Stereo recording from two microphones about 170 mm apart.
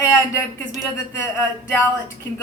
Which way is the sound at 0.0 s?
15° left (ahead or behind).